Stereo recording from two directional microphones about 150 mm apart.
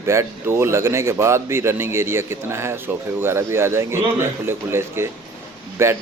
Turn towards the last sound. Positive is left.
turn(degrees=-15)  # may be behind; listen again after turning